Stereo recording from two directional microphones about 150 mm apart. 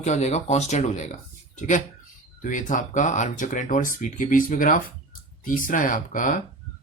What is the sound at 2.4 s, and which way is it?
Speech, 60° left (ahead or behind).